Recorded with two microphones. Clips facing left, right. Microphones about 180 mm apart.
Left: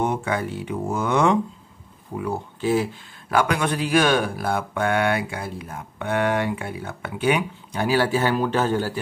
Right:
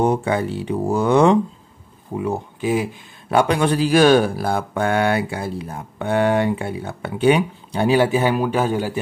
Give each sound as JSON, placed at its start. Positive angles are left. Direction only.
{"t": 0.0, "sound": "speech", "side_deg": -35}
{"t": 2.1, "sound": "speech", "side_deg": -20}
{"t": 7.9, "sound": "a man's voice", "side_deg": -15}